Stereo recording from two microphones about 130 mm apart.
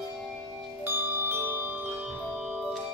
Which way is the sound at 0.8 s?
15° right (ahead or behind).